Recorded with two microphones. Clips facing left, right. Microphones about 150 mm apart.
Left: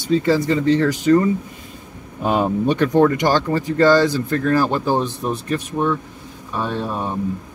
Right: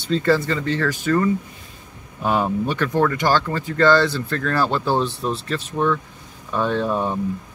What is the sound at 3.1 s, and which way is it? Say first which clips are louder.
Speech: left 2 dB; 15° left (ahead or behind).